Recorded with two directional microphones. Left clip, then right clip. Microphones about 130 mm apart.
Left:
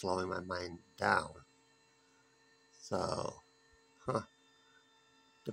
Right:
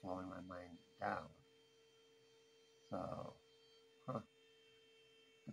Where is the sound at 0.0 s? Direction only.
25° left (ahead or behind).